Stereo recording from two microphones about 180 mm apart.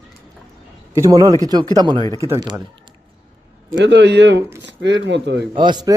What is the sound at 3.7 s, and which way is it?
A man's voice, 75° right (ahead or behind).